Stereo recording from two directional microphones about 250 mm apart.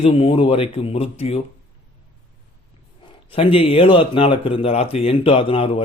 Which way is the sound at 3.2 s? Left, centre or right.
Left.